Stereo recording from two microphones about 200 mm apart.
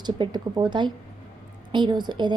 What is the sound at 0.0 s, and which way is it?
A woman's voice, 20° right (ahead or behind).